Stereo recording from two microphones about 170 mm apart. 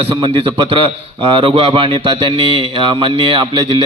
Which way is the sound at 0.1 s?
30° right (ahead or behind).